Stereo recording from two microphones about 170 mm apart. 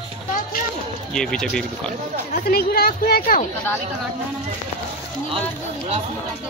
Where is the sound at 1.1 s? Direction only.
5° left (ahead or behind).